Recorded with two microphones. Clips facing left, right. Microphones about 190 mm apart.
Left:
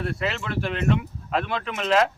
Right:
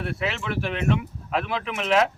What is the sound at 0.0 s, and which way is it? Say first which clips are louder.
A man's voice: left 1 dB; 5° right (ahead or behind).